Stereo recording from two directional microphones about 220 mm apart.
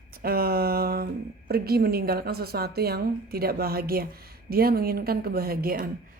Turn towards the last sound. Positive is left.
turn(degrees=-40)  # may be behind; listen again after turning